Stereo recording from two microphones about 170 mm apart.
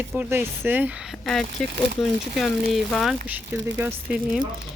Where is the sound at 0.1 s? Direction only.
10° right (ahead or behind).